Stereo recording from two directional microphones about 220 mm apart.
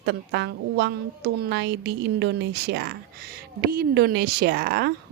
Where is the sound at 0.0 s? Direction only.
50° right (ahead or behind).